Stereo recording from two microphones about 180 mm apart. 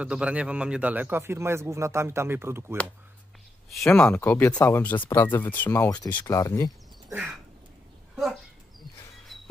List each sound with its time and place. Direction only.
0.0 s a man's voice: 5° right (ahead or behind)
3.8 s speech: 10° left (ahead or behind)
9.3 s a sound: centre (ahead or behind)